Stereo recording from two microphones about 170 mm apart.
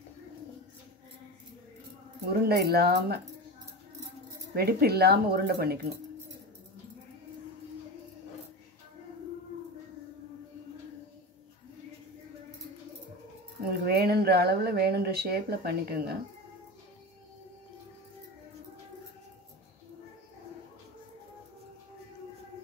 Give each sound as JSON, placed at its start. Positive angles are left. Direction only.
{"t": 2.4, "sound": "speech", "side_deg": -65}
{"t": 4.6, "sound": "speech", "side_deg": -65}
{"t": 13.7, "sound": "speech", "side_deg": -65}